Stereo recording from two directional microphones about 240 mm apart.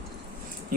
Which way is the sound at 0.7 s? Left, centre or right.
Right.